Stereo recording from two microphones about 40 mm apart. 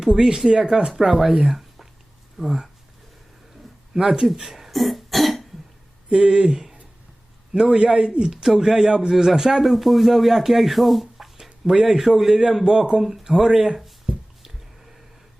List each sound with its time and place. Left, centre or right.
0.0 s a man's voice: centre
3.9 s speech: centre
6.1 s speech: centre
6.5 s a man's voice: centre
14.4 s a sound: centre